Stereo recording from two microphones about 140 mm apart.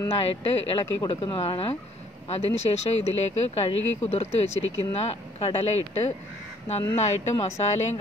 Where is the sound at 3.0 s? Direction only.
50° left (ahead or behind).